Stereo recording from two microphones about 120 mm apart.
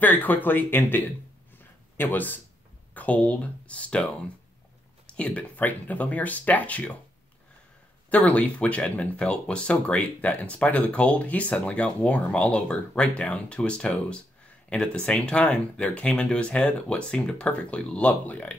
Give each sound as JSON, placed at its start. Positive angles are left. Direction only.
{"t": 0.0, "sound": "speech", "side_deg": 15}
{"t": 8.1, "sound": "speech", "side_deg": 10}